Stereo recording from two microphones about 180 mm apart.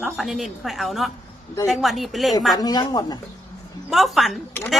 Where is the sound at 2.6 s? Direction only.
20° left (ahead or behind).